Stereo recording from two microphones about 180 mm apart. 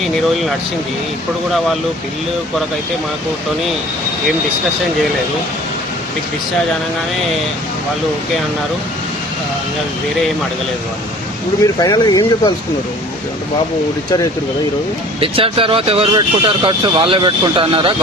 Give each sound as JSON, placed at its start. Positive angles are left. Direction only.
{"t": 11.6, "sound": "speech", "side_deg": 20}
{"t": 15.2, "sound": "speech", "side_deg": -30}